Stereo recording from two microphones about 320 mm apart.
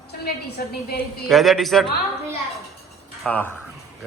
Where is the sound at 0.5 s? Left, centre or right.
Left.